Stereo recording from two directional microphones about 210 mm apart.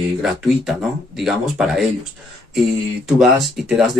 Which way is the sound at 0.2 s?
Centre (ahead or behind).